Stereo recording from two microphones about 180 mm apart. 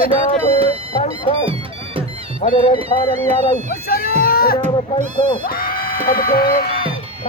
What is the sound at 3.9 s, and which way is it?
Run, 55° left (ahead or behind).